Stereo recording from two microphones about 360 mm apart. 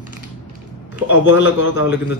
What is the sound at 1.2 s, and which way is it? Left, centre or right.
Speech, left.